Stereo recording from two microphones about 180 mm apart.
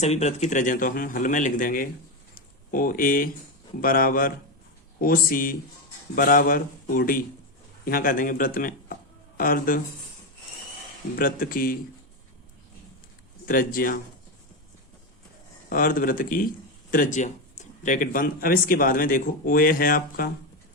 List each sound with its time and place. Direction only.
0.0 s a man's voice: 35° left (ahead or behind)
11.2 s a man's voice: 50° left (ahead or behind)
13.4 s a man's voice: 50° left (ahead or behind)
15.7 s a man's voice: 50° left (ahead or behind)